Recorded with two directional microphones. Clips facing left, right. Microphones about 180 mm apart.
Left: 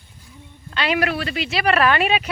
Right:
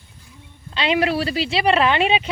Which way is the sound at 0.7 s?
25° right (ahead or behind).